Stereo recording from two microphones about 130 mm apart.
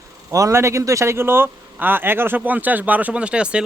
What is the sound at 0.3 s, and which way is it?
Speech, 25° right (ahead or behind).